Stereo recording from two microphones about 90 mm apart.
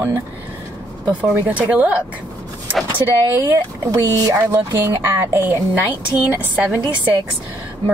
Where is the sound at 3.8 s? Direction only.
40° right (ahead or behind); by 6.8 s 20° right (ahead or behind).